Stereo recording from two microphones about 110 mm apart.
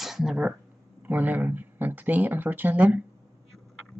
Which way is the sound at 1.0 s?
15° right (ahead or behind).